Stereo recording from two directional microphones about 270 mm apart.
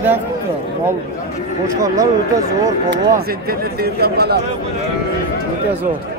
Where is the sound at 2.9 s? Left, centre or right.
Right.